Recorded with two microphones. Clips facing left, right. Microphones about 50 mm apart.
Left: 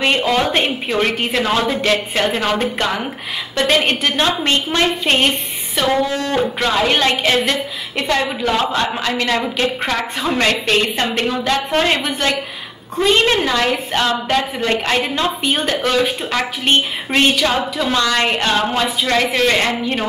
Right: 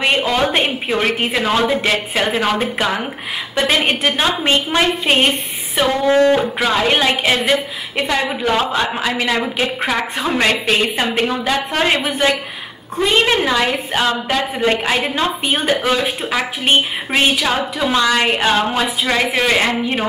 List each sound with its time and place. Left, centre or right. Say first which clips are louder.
0.0 s a woman's voice: even; centre
6.0 s speech: right 9 dB; right
6.3 s a woman's voice: right 1 dB; centre